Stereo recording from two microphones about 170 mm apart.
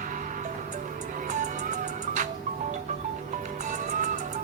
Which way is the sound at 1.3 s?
45° right (ahead or behind).